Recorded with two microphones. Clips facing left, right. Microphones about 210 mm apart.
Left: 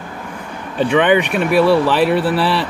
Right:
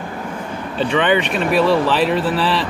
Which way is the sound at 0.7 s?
10° left (ahead or behind).